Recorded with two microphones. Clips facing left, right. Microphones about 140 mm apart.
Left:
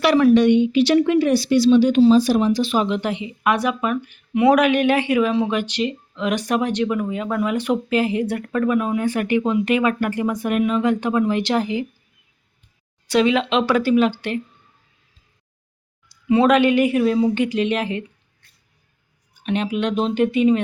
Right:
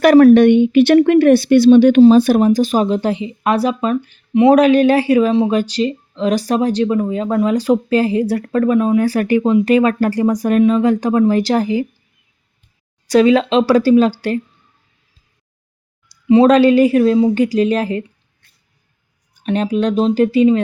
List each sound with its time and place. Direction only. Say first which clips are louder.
0.0 s a woman's voice: right 7 dB; 50° right (ahead or behind)
13.1 s speech: right 6 dB; 40° right (ahead or behind)
16.0 s a woman's voice: right 6 dB; 30° right (ahead or behind)
19.4 s speech: right 5 dB; 40° right (ahead or behind)